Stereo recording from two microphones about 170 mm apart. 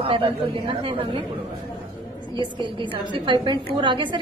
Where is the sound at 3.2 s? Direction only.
30° right (ahead or behind).